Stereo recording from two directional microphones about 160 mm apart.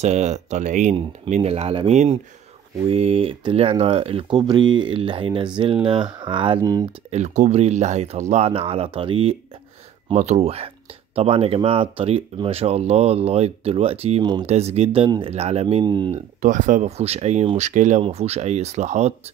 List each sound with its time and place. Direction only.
0.0 s speech: 45° right (ahead or behind); by 6.9 s 20° right (ahead or behind)
7.1 s speech: 45° right (ahead or behind); by 16.2 s 30° right (ahead or behind)
16.3 s speech: 50° right (ahead or behind)